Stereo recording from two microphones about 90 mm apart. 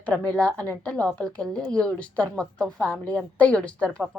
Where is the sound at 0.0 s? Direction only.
15° left (ahead or behind).